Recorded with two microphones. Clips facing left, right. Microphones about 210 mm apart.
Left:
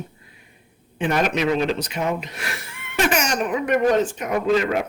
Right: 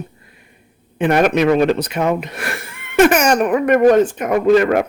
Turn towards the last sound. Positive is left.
turn(degrees=-55)  # may be behind; listen again after turning